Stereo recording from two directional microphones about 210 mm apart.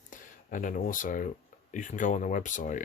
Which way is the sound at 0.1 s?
40° left (ahead or behind).